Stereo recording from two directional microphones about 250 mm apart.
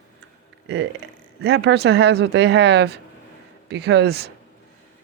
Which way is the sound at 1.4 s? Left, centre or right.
Right.